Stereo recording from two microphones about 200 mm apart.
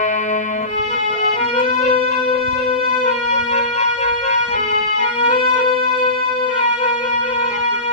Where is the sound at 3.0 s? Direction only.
35° left (ahead or behind).